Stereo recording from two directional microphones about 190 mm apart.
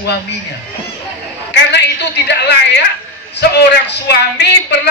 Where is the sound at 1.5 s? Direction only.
65° left (ahead or behind).